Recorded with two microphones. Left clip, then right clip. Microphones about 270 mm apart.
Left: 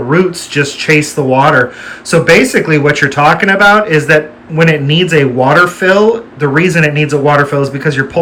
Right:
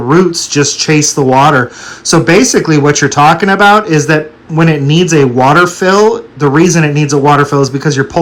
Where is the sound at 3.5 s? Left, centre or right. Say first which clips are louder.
Right 1 dB; left.